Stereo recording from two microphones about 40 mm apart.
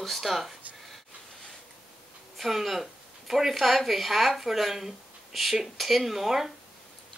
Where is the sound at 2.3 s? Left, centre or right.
Centre.